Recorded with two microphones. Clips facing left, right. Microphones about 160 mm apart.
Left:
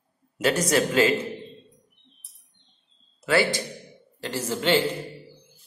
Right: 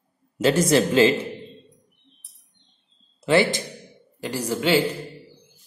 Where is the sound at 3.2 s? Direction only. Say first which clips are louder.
Right 3 dB; 25° right (ahead or behind).